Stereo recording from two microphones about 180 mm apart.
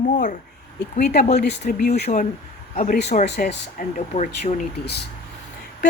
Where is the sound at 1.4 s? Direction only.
60° left (ahead or behind).